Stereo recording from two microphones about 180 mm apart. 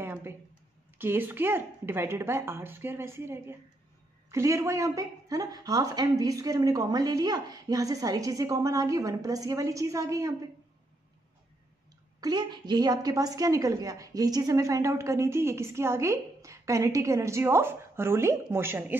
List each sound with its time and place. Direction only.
0.0 s a sound: 15° right (ahead or behind)
0.9 s a woman's voice: 10° right (ahead or behind)
12.2 s a woman's voice: 25° right (ahead or behind)